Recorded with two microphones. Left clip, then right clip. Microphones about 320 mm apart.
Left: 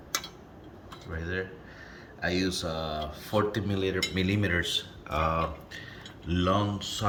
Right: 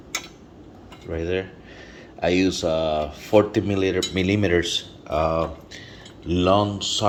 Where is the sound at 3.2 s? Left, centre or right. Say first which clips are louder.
Right 10 dB; centre.